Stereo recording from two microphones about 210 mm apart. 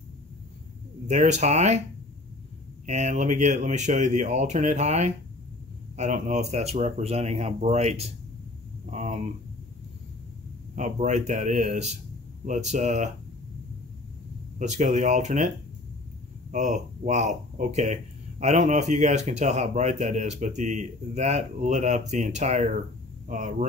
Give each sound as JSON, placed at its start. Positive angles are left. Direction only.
{"t": 1.0, "sound": "speech", "side_deg": -35}
{"t": 2.9, "sound": "speech", "side_deg": -35}
{"t": 10.8, "sound": "speech", "side_deg": -35}
{"t": 14.6, "sound": "speech", "side_deg": -35}
{"t": 16.5, "sound": "speech", "side_deg": -35}